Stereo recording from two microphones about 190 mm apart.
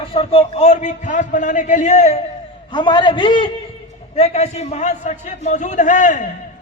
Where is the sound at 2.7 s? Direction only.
25° left (ahead or behind); by 6.3 s 40° left (ahead or behind).